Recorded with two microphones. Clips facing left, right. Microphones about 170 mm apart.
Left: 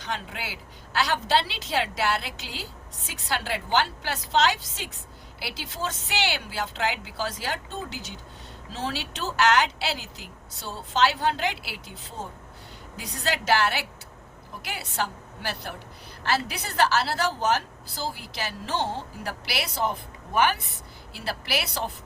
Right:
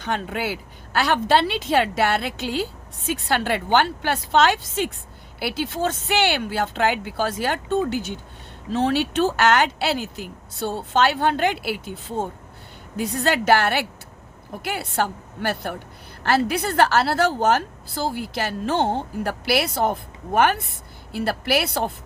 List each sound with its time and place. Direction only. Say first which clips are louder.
0.0 s a woman's voice: right 8 dB; 55° right (ahead or behind)